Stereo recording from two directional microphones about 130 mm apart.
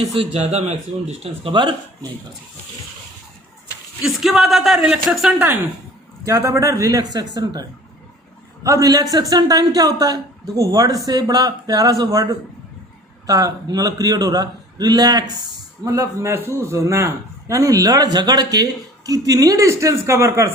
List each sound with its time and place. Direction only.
0.0 s speech: 45° right (ahead or behind)
1.5 s speech: 35° right (ahead or behind)
4.0 s speech: centre (ahead or behind)
6.2 s speech: 20° right (ahead or behind)